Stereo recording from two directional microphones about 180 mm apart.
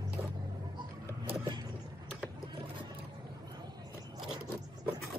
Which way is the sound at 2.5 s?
30° right (ahead or behind).